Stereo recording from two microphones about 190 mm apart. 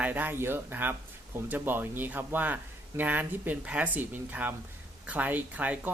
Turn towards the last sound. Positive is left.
turn(degrees=-10)  # may be behind; listen again after turning